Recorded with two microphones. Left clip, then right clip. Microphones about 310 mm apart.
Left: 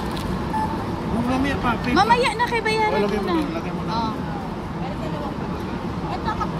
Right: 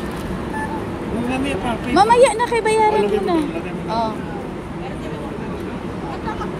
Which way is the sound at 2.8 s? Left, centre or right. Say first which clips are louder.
Right 5 dB; centre.